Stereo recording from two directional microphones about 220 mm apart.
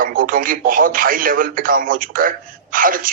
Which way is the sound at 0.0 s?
40° right (ahead or behind).